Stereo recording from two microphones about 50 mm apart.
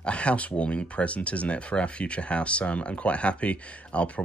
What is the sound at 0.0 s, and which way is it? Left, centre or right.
Speech, left.